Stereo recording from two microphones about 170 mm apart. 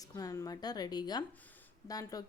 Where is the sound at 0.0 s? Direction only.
20° left (ahead or behind).